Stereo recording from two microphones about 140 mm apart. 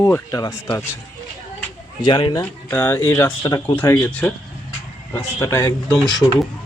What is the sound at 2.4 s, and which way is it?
Speech, 15° left (ahead or behind).